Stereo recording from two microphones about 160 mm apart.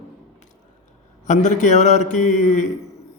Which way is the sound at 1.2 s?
50° left (ahead or behind).